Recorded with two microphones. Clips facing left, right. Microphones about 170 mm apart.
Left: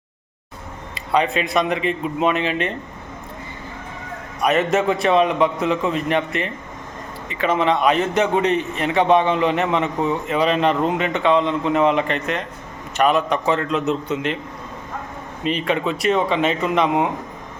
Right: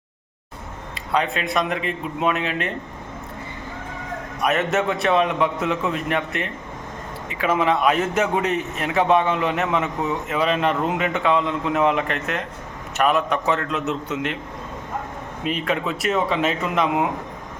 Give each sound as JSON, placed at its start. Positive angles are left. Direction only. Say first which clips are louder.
{"t": 0.9, "sound": "a man's voice", "louder": "left 4 dB", "side_deg": 0}
{"t": 4.4, "sound": "a man's voice", "louder": "left 3 dB", "side_deg": 0}
{"t": 15.4, "sound": "a man's voice", "louder": "left 3 dB", "side_deg": 0}